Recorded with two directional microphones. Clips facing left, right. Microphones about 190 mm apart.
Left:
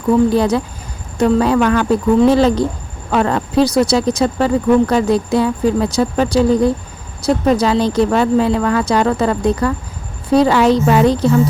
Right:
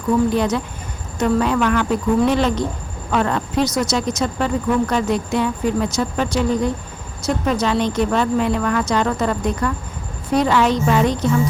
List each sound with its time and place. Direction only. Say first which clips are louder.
0.3 s speech: left 4 dB; 35° left (ahead or behind)